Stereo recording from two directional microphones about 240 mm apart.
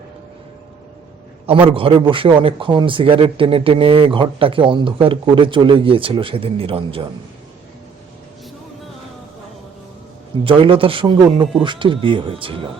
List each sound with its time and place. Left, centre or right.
1.6 s a man's voice: right
10.4 s a man's voice: right